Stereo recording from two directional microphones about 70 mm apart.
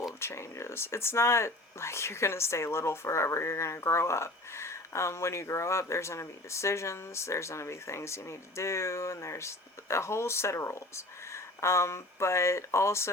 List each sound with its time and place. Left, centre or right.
0.2 s speech: left